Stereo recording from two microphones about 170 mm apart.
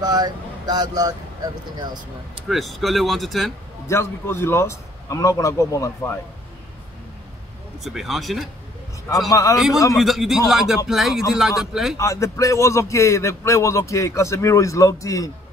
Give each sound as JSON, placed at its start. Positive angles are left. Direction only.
{"t": 0.0, "sound": "speech", "side_deg": -25}
{"t": 2.4, "sound": "speech", "side_deg": 0}
{"t": 3.8, "sound": "a man's voice", "side_deg": 15}
{"t": 7.8, "sound": "speech", "side_deg": 0}
{"t": 9.3, "sound": "a man's voice", "side_deg": 20}
{"t": 9.9, "sound": "speech", "side_deg": 0}
{"t": 12.0, "sound": "a man's voice", "side_deg": 20}